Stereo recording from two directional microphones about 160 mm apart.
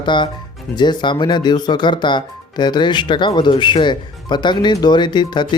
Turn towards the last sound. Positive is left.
turn(degrees=30)  # may be behind; listen again after turning